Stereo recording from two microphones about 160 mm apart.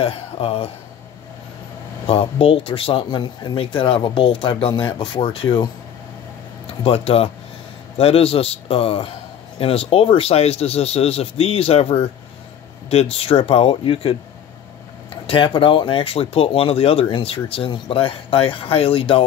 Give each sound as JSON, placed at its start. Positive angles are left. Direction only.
{"t": 0.0, "sound": "speech", "side_deg": 35}
{"t": 2.0, "sound": "speech", "side_deg": 35}
{"t": 6.8, "sound": "speech", "side_deg": 40}
{"t": 15.2, "sound": "speech", "side_deg": 35}